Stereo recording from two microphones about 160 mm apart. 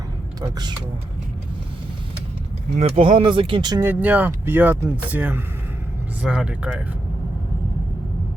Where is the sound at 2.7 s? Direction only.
40° right (ahead or behind).